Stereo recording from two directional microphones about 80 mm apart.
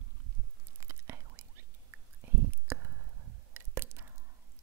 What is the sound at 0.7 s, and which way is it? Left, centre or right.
Whispering, right.